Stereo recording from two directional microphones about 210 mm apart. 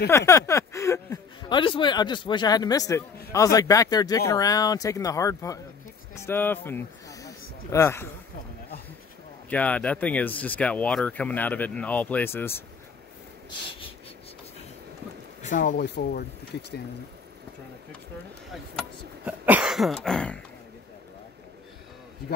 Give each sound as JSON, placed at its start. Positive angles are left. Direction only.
{"t": 0.1, "sound": "speech", "side_deg": 15}
{"t": 9.5, "sound": "speech", "side_deg": 5}
{"t": 15.4, "sound": "speech", "side_deg": 40}
{"t": 15.8, "sound": "speech", "side_deg": 50}
{"t": 18.5, "sound": "a sound", "side_deg": -5}